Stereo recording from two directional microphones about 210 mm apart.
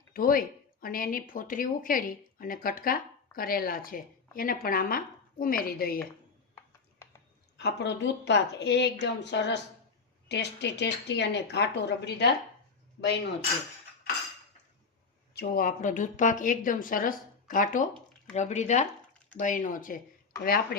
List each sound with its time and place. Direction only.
0.1 s speech: 45° left (ahead or behind)
7.5 s speech: 55° left (ahead or behind)
15.4 s a woman's voice: 40° left (ahead or behind)